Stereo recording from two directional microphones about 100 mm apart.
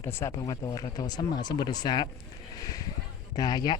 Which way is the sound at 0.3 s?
40° left (ahead or behind).